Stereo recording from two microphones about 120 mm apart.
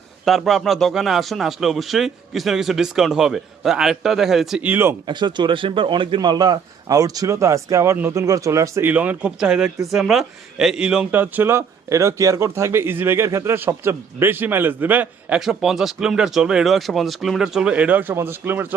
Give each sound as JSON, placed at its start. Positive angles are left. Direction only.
{"t": 0.3, "sound": "speech", "side_deg": 0}
{"t": 4.6, "sound": "speech", "side_deg": -15}
{"t": 5.0, "sound": "speech", "side_deg": -40}
{"t": 15.4, "sound": "speech", "side_deg": 0}